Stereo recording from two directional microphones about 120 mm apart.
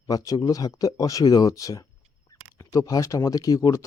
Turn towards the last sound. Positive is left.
turn(degrees=30)  # may be behind; listen again after turning